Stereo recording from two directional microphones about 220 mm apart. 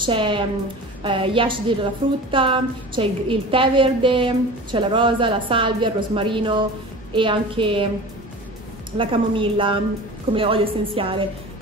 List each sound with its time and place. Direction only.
0.0 s a woman's voice: 20° right (ahead or behind)
8.9 s a woman's voice: 25° right (ahead or behind)